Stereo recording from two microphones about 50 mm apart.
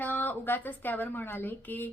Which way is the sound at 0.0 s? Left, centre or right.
Left.